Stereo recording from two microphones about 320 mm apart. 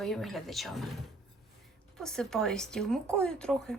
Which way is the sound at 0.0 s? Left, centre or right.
Centre.